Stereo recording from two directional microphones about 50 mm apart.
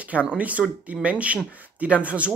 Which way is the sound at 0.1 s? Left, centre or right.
Right.